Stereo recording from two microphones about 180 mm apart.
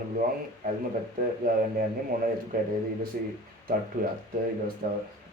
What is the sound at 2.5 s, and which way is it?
Speech, 55° right (ahead or behind).